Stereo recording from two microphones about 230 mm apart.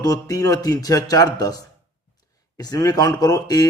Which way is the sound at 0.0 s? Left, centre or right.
Centre.